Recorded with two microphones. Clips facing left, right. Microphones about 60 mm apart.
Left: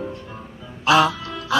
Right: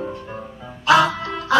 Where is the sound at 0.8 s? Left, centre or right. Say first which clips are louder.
Right 1 dB; right.